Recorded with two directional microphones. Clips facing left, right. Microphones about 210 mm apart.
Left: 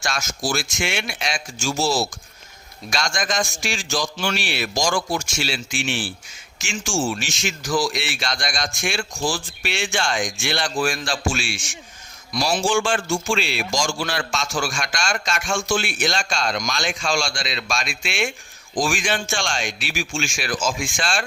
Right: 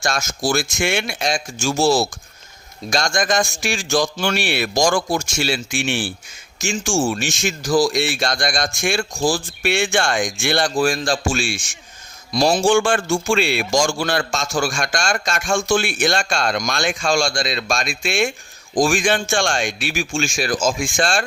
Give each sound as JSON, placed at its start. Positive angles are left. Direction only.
{"t": 0.0, "sound": "a man's voice", "side_deg": -50}
{"t": 7.6, "sound": "a man's voice", "side_deg": -35}